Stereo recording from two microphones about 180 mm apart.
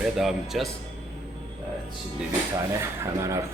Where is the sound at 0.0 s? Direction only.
Centre (ahead or behind).